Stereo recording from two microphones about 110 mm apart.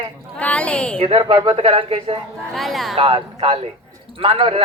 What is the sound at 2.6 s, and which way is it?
Speech, centre (ahead or behind).